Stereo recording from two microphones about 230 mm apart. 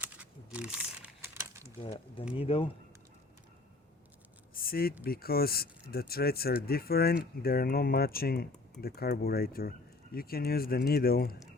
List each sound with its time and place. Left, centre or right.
0.0 s crumpling: centre
1.8 s speech: left
4.5 s a sound: left
5.0 s speech: left